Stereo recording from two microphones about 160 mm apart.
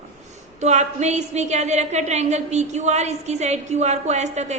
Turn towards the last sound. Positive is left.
turn(degrees=-45)  # may be behind; listen again after turning